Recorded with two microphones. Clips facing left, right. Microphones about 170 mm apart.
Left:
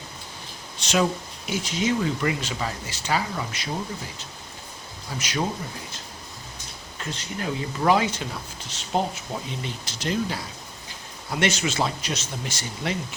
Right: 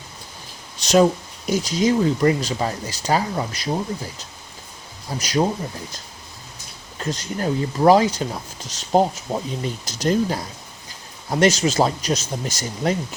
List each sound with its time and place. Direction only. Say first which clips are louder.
0.8 s speech: right 8 dB; 40° right (ahead or behind)
5.1 s speech: right 7 dB; 35° right (ahead or behind)
7.0 s speech: right 6 dB; 40° right (ahead or behind)